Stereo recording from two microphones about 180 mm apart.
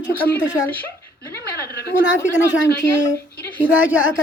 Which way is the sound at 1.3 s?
65° left (ahead or behind).